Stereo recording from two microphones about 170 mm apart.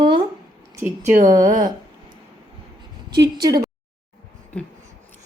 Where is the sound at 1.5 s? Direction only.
50° right (ahead or behind).